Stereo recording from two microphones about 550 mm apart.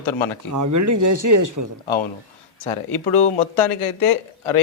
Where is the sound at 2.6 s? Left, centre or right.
Left.